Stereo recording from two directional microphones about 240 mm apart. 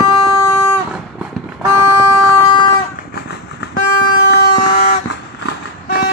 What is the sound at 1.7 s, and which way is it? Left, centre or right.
Vehicle, centre.